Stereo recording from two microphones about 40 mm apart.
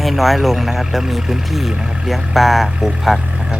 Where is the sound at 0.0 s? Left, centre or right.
Centre.